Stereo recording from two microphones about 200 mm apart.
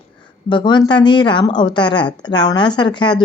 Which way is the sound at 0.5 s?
25° left (ahead or behind).